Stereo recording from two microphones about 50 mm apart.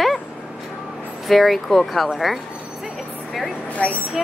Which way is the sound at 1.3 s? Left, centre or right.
Centre.